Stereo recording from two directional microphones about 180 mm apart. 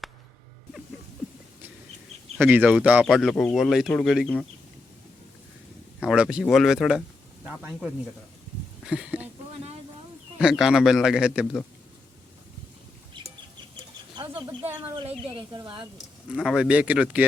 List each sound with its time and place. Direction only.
2.4 s a man's voice: 10° right (ahead or behind)
6.1 s a man's voice: 5° right (ahead or behind)
10.3 s a man's voice: centre (ahead or behind)
14.8 s speech: 30° right (ahead or behind)
16.3 s speech: 5° right (ahead or behind)